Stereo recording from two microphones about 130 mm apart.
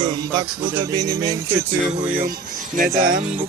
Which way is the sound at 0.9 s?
25° right (ahead or behind).